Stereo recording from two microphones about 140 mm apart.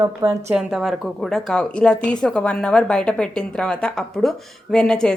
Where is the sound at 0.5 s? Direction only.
Centre (ahead or behind).